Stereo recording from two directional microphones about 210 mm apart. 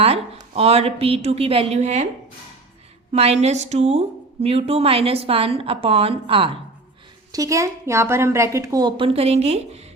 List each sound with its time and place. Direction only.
0.0 s a woman's voice: 30° right (ahead or behind)
3.1 s a woman's voice: 30° right (ahead or behind)
7.3 s a woman's voice: 15° right (ahead or behind); by 9.8 s 30° right (ahead or behind)